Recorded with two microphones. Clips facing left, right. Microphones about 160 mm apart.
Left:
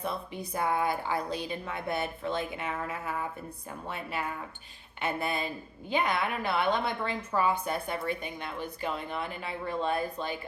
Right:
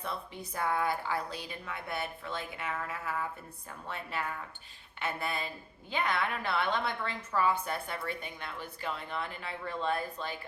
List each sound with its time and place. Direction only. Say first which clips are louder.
0.0 s a woman's voice: left 4 dB; 15° left (ahead or behind)